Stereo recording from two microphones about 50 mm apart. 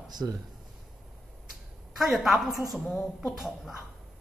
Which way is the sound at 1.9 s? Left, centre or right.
Centre.